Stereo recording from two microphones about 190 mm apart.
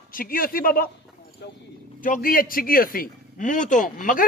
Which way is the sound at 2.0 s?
45° left (ahead or behind).